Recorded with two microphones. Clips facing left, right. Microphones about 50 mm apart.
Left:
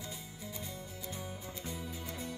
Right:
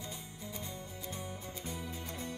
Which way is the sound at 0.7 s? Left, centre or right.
Right.